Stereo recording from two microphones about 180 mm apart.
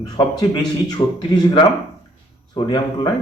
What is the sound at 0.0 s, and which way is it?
A man's voice, 20° left (ahead or behind).